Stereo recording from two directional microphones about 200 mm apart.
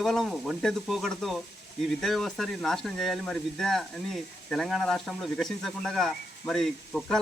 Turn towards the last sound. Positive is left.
turn(degrees=0)  # may be behind; listen again after turning